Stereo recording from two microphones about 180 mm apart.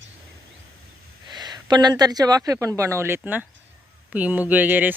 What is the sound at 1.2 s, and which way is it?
Speech, 25° right (ahead or behind).